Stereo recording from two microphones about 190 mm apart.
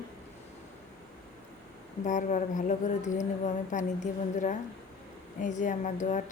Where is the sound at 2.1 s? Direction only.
40° left (ahead or behind).